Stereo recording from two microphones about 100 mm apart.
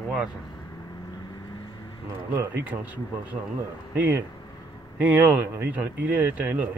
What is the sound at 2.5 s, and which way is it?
A man's voice, 15° right (ahead or behind).